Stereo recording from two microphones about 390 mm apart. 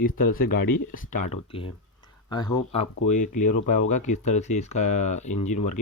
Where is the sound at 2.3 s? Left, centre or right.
Centre.